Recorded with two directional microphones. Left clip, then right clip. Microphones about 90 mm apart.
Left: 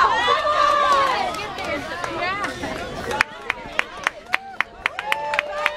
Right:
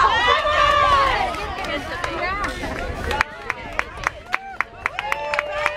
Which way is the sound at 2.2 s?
30° left (ahead or behind).